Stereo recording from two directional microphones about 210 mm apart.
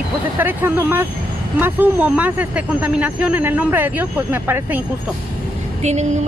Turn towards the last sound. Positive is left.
turn(degrees=-35)  # may be behind; listen again after turning